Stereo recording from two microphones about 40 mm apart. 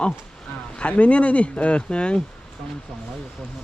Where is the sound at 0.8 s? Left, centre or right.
Left.